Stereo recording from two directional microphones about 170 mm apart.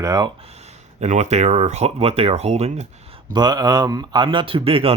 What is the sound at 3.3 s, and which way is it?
Speech, 25° right (ahead or behind).